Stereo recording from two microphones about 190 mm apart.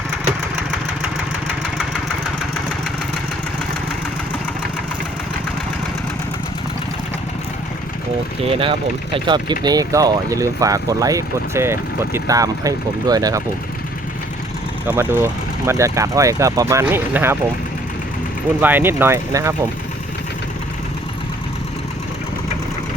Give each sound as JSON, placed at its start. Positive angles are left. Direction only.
{"t": 8.4, "sound": "speech", "side_deg": -30}
{"t": 14.8, "sound": "speech", "side_deg": -15}
{"t": 18.6, "sound": "speech", "side_deg": -10}